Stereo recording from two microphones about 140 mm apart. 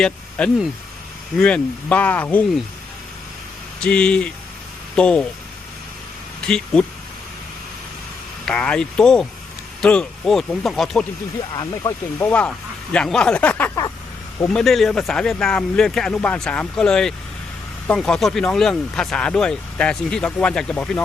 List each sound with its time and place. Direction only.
0.0 s speech: 5° left (ahead or behind)
3.8 s speech: 5° left (ahead or behind)
6.4 s speech: 5° left (ahead or behind)
8.4 s speech: 5° left (ahead or behind)
11.5 s speech: 30° left (ahead or behind)
12.3 s speech: 10° left (ahead or behind)